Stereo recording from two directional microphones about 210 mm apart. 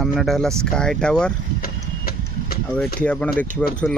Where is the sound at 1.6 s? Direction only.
45° left (ahead or behind).